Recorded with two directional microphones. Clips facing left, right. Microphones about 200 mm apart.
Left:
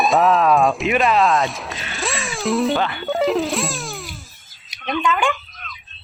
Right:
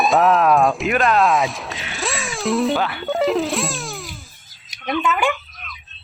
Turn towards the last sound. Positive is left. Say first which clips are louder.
# even
turn(degrees=-5)  # may be behind; listen again after turning